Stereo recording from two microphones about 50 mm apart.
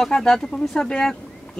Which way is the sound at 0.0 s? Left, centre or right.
Centre.